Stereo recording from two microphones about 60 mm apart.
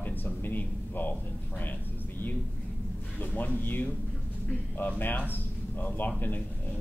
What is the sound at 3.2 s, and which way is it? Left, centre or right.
Speech, left.